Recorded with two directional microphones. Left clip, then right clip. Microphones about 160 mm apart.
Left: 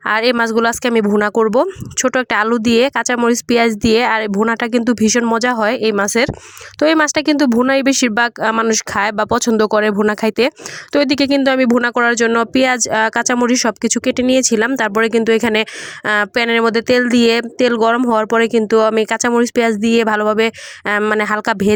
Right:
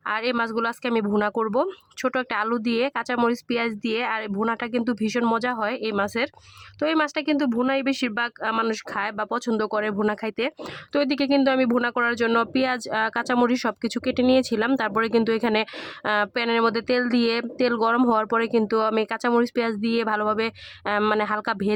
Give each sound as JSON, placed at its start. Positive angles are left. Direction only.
{"t": 0.0, "sound": "speech", "side_deg": 40}